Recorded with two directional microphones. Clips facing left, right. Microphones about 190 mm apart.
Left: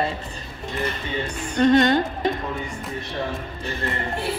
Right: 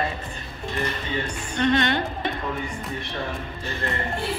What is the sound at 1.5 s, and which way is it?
Speech, 45° left (ahead or behind).